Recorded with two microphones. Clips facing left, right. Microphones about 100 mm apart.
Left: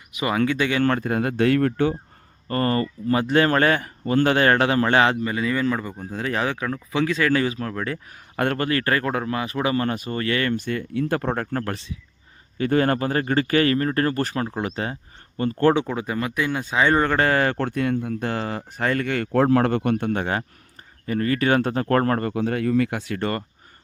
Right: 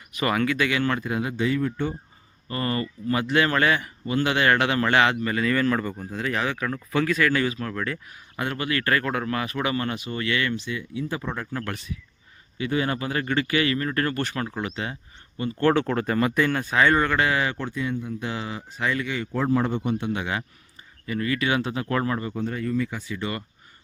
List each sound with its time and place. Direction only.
0.1 s speech: 10° left (ahead or behind)
0.3 s speech: 25° left (ahead or behind)
0.8 s speech: 45° left (ahead or behind); by 2.0 s 75° left (ahead or behind)
2.5 s speech: 40° left (ahead or behind)
5.2 s speech: 20° left (ahead or behind)
6.0 s speech: 30° left (ahead or behind)
8.4 s speech: 50° left (ahead or behind)
8.8 s speech: 30° left (ahead or behind); by 11.6 s 60° left (ahead or behind)
11.6 s speech: 30° left (ahead or behind)
12.5 s speech: 45° left (ahead or behind)
15.7 s speech: 10° left (ahead or behind)
16.5 s speech: 20° left (ahead or behind); by 18.2 s 75° left (ahead or behind)
18.2 s speech: 50° left (ahead or behind)
22.3 s speech: 85° left